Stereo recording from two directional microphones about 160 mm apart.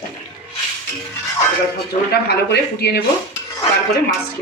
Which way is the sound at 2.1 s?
90° left.